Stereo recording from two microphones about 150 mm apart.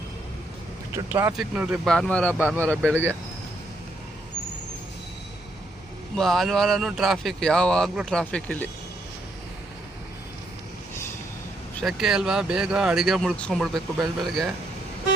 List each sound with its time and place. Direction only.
0.9 s speech: 15° right (ahead or behind)
1.3 s speech: centre (ahead or behind)
2.3 s speech: 10° right (ahead or behind)
6.1 s speech: centre (ahead or behind)
11.8 s speech: 5° right (ahead or behind)